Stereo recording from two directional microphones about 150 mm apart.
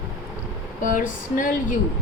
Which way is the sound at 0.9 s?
60° left (ahead or behind).